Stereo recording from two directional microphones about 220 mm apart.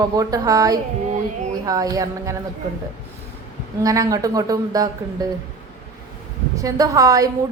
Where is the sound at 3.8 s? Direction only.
15° right (ahead or behind).